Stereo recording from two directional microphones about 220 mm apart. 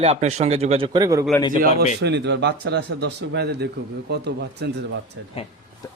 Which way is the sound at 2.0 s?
50° right (ahead or behind).